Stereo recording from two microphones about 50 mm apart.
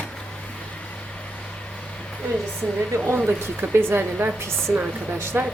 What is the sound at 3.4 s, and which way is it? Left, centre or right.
Speech, right.